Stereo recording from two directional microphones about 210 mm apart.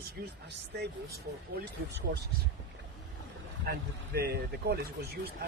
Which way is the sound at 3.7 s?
45° right (ahead or behind).